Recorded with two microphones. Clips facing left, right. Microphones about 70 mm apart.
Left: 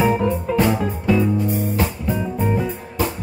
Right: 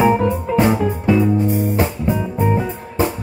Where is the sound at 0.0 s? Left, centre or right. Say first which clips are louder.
Right 3 dB; centre.